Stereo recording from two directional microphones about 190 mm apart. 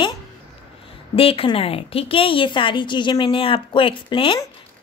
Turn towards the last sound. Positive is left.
turn(degrees=25)  # may be behind; listen again after turning